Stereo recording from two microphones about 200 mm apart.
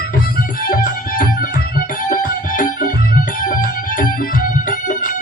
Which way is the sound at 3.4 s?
40° left (ahead or behind).